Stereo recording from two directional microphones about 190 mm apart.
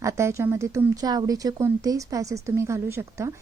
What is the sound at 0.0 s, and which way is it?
Speech, 15° right (ahead or behind).